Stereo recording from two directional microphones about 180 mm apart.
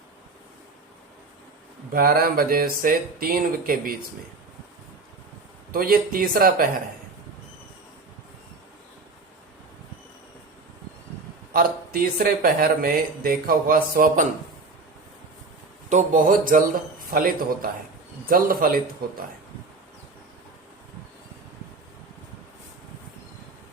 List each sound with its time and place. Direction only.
1.9 s speech: 55° right (ahead or behind)
5.7 s speech: 55° right (ahead or behind)
11.5 s speech: 55° right (ahead or behind)
15.9 s speech: 45° right (ahead or behind)